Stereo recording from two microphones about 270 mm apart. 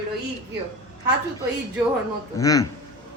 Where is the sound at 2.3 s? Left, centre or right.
Centre.